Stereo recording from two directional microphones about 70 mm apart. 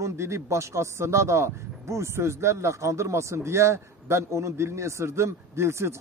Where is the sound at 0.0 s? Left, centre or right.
Right.